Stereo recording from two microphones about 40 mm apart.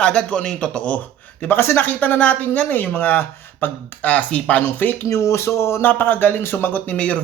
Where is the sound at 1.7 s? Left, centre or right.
Left.